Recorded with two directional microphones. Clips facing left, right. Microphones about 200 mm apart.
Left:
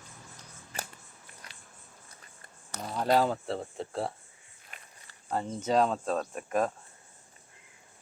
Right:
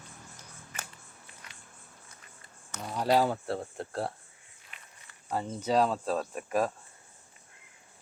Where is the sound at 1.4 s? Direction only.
35° left (ahead or behind).